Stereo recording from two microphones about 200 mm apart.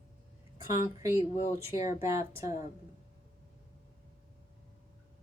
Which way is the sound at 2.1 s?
15° right (ahead or behind).